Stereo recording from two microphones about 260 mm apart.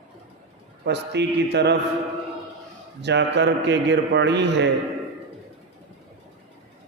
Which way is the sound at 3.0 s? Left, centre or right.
Right.